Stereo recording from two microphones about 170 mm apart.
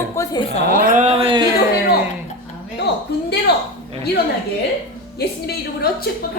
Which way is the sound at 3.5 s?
75° left (ahead or behind).